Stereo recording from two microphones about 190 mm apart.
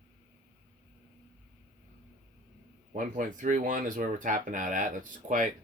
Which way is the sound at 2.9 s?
45° right (ahead or behind).